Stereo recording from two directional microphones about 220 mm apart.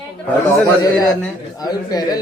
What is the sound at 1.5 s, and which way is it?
Speech, 15° left (ahead or behind).